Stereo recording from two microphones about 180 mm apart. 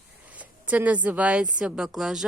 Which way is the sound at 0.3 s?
10° right (ahead or behind).